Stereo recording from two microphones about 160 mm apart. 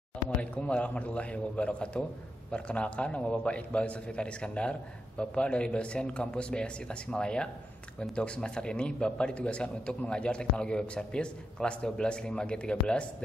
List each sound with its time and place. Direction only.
0.4 s a man's voice: 5° left (ahead or behind)